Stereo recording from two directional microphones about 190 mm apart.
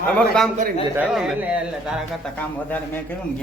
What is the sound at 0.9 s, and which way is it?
Speech, 5° right (ahead or behind).